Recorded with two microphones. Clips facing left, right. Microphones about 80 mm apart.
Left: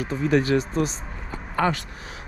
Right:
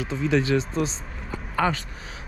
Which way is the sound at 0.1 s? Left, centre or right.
Left.